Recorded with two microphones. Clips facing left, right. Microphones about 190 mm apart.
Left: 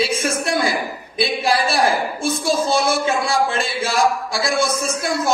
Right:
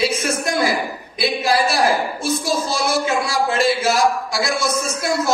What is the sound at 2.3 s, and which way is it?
A man's voice, 30° left (ahead or behind).